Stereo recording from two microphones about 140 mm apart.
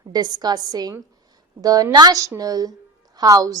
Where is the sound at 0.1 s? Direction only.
30° right (ahead or behind).